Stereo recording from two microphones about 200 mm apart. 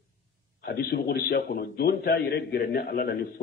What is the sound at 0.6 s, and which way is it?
A man's voice, 50° left (ahead or behind).